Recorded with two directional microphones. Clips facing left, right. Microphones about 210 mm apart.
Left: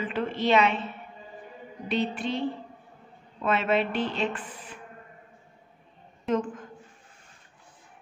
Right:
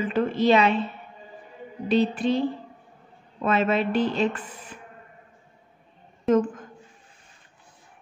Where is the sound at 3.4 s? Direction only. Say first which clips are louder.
Right 2 dB; 40° right (ahead or behind).